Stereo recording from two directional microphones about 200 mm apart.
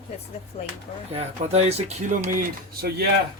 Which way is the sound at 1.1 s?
35° right (ahead or behind).